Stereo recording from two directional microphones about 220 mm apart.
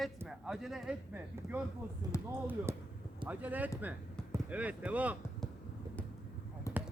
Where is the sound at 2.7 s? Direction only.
10° right (ahead or behind).